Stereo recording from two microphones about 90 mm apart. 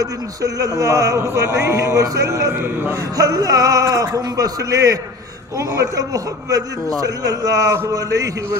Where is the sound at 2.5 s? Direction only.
20° right (ahead or behind).